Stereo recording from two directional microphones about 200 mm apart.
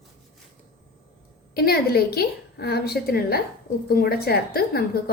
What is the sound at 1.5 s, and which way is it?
A woman's voice, 50° left (ahead or behind).